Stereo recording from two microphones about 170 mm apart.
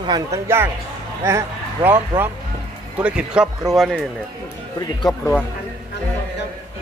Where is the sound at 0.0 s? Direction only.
25° right (ahead or behind).